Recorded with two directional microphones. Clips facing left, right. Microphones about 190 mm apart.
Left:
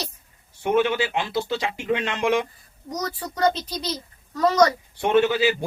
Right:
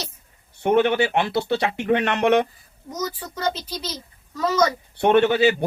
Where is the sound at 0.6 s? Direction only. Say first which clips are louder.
Right 3 dB; 65° right (ahead or behind).